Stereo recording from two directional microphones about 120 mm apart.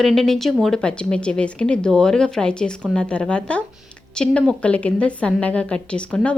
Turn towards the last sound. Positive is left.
turn(degrees=10)  # may be behind; listen again after turning